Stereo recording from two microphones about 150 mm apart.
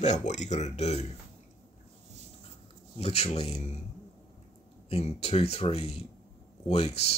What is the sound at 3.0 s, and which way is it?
Speech, 40° left (ahead or behind).